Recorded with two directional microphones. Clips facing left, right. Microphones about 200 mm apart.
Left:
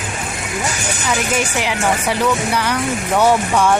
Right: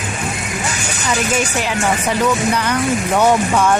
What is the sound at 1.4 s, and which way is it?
A child's voice, 15° left (ahead or behind).